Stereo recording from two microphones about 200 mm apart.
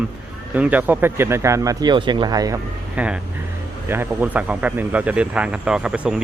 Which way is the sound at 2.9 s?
5° right (ahead or behind).